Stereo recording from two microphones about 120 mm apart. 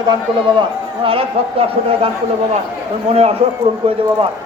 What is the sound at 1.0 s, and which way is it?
Speech, 50° right (ahead or behind).